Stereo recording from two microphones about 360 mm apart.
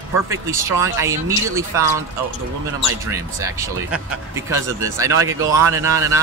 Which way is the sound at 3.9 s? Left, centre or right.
Centre.